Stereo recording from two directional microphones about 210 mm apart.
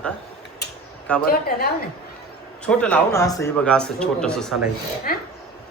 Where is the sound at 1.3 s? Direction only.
45° left (ahead or behind).